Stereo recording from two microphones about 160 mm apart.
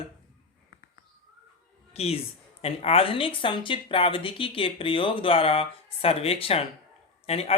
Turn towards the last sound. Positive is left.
turn(degrees=40)  # may be behind; listen again after turning